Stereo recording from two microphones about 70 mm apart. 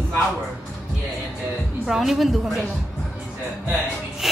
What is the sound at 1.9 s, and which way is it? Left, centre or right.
Speech, centre.